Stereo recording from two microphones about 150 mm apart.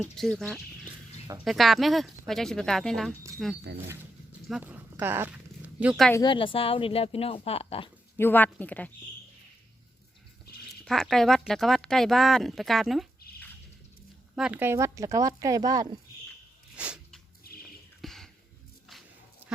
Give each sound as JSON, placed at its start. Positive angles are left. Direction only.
{"t": 0.2, "sound": "speech", "side_deg": 0}
{"t": 4.6, "sound": "a sound", "side_deg": -10}
{"t": 6.2, "sound": "speech", "side_deg": 35}
{"t": 8.2, "sound": "a woman's voice", "side_deg": 10}
{"t": 10.8, "sound": "speech", "side_deg": 0}
{"t": 14.3, "sound": "speech", "side_deg": -5}
{"t": 16.7, "sound": "a sound", "side_deg": -5}
{"t": 17.5, "sound": "bird", "side_deg": 90}
{"t": 18.0, "sound": "a sound", "side_deg": 0}